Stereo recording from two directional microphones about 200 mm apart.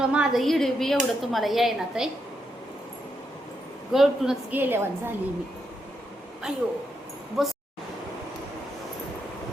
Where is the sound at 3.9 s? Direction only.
Centre (ahead or behind).